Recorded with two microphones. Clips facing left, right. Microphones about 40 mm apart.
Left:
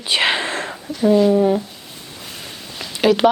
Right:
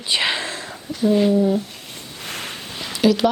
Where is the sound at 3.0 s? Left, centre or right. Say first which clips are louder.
Left 3 dB; left.